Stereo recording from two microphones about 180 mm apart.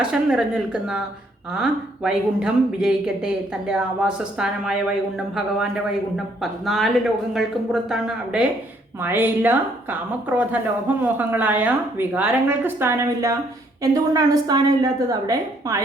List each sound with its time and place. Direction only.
0.0 s a woman's voice: 5° right (ahead or behind); by 15.8 s 20° right (ahead or behind)